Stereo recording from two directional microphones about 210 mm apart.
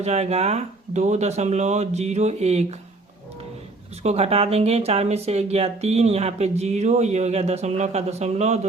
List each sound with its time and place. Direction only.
0.0 s speech: 30° right (ahead or behind)
4.0 s speech: 30° right (ahead or behind)